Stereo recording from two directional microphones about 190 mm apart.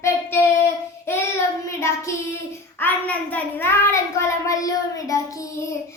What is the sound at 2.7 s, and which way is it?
A child's voice, 10° left (ahead or behind).